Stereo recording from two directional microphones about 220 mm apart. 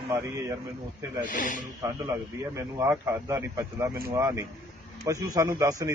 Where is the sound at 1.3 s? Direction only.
35° left (ahead or behind).